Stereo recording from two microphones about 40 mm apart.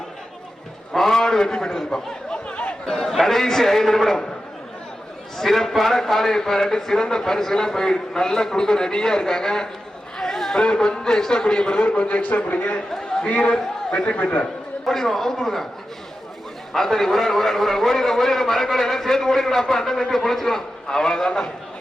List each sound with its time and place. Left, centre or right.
0.9 s a man's voice: centre
2.3 s a sound: left
2.8 s a man's voice: centre
5.4 s a man's voice: centre
10.2 s a sound: centre
10.6 s a man's voice: centre
14.8 s a man's voice: centre
16.7 s a man's voice: centre